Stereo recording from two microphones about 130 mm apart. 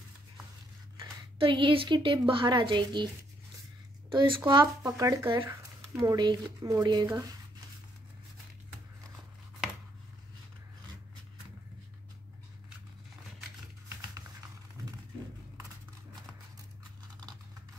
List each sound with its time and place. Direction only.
0.9 s speech: 40° right (ahead or behind)
4.1 s speech: 35° right (ahead or behind)